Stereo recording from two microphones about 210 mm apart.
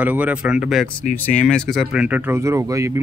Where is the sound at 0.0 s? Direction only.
5° right (ahead or behind).